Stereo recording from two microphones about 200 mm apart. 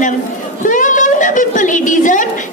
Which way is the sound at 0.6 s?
40° left (ahead or behind).